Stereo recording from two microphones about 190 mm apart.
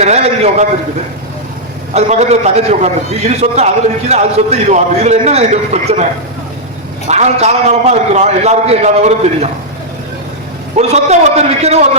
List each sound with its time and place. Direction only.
0.0 s a man's voice: 35° right (ahead or behind)
1.9 s a man's voice: 35° right (ahead or behind)
7.1 s a man's voice: 35° right (ahead or behind)
10.8 s a man's voice: 35° right (ahead or behind)